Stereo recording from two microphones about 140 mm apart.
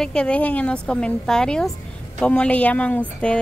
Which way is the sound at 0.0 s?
5° left (ahead or behind).